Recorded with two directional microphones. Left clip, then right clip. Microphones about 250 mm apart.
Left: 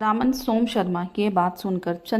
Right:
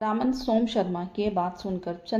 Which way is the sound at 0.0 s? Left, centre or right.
Left.